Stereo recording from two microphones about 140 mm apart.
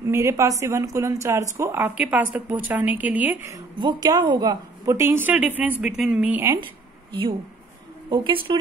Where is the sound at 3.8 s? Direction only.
30° right (ahead or behind); by 6.6 s 15° right (ahead or behind).